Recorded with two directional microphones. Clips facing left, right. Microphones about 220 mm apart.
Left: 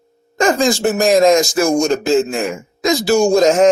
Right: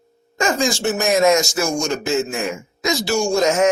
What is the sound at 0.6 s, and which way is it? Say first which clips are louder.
Speech: left 5 dB; 35° left (ahead or behind).